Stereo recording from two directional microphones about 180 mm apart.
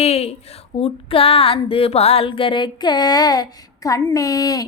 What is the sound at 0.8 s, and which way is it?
Female singing, 30° left (ahead or behind).